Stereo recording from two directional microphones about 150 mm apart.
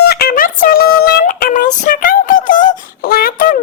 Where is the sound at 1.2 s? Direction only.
65° left (ahead or behind).